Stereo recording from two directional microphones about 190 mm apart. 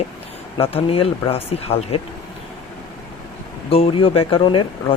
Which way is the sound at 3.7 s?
30° left (ahead or behind).